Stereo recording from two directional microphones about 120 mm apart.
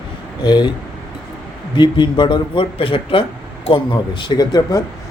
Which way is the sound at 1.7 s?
40° left (ahead or behind).